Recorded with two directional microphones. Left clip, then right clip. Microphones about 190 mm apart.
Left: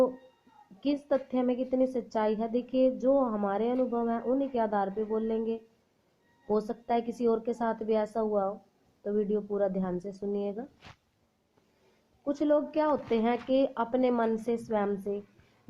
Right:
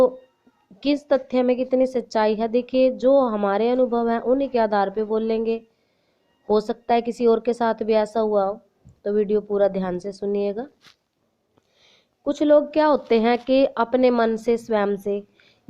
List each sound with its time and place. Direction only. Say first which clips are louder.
0.8 s a woman's voice: right 8 dB; 35° right (ahead or behind)
12.2 s a woman's voice: right 10 dB; 40° right (ahead or behind)